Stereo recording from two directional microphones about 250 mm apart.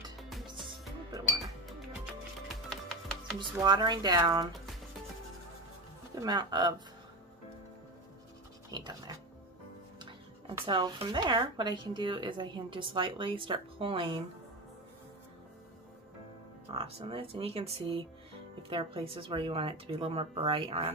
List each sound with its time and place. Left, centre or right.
2.4 s music: centre
3.3 s speech: centre
6.2 s speech: centre
8.7 s speech: centre
10.6 s speech: centre
16.7 s speech: right